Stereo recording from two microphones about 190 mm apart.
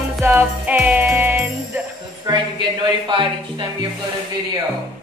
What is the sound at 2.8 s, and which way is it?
Speech, 25° right (ahead or behind).